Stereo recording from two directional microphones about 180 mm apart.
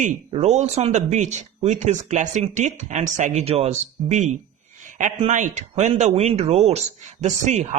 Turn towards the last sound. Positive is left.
turn(degrees=-40)  # may be behind; listen again after turning